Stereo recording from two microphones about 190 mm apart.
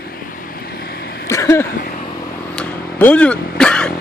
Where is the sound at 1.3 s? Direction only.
15° left (ahead or behind).